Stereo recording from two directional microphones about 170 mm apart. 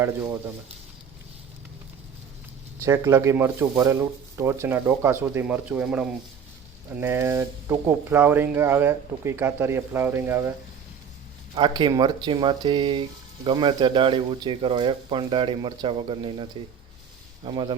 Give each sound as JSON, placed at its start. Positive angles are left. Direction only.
{"t": 0.0, "sound": "speech", "side_deg": -15}
{"t": 2.8, "sound": "speech", "side_deg": -15}
{"t": 11.5, "sound": "speech", "side_deg": -25}